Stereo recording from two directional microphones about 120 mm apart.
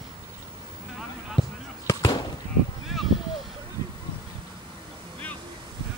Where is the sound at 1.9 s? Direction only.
35° left (ahead or behind).